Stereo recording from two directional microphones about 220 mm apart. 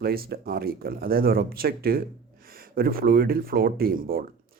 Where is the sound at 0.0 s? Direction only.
45° right (ahead or behind).